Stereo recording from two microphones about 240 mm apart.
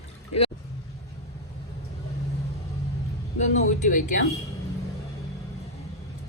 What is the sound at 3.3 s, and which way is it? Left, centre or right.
Speech, left.